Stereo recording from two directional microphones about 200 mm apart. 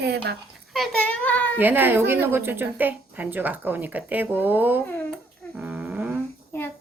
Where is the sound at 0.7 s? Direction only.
Centre (ahead or behind).